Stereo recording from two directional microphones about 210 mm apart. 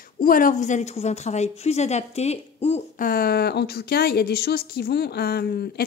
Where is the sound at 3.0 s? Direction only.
45° left (ahead or behind).